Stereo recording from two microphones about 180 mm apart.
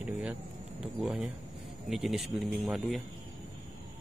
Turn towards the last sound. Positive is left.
turn(degrees=0)  # may be behind; listen again after turning